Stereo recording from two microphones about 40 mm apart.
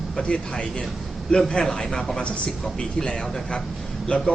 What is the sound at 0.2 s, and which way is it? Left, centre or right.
A man's voice, left.